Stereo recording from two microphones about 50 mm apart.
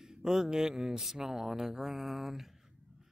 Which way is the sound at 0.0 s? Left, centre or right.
Centre.